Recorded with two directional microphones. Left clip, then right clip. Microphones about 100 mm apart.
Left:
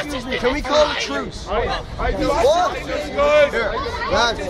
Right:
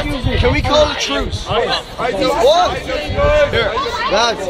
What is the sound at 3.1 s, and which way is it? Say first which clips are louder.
Speech: right 1 dB; 25° left (ahead or behind).